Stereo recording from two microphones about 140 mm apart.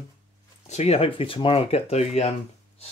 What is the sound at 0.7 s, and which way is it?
Speech, 50° left (ahead or behind).